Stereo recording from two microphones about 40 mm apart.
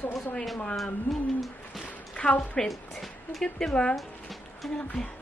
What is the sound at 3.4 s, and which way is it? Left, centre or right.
Speech, centre.